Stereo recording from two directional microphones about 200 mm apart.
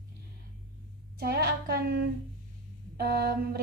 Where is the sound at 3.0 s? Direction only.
50° right (ahead or behind).